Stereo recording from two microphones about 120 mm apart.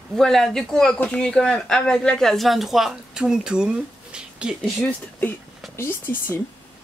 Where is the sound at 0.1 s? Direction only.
5° left (ahead or behind).